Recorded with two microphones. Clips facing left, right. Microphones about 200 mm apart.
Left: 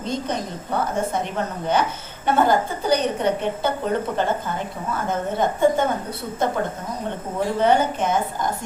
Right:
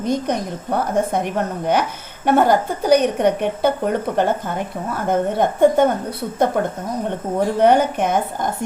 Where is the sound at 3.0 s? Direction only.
60° right (ahead or behind).